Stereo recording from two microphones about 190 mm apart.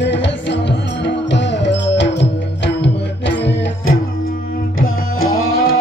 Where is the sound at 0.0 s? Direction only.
65° left (ahead or behind).